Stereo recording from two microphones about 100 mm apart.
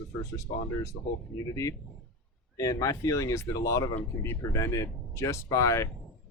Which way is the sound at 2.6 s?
35° left (ahead or behind).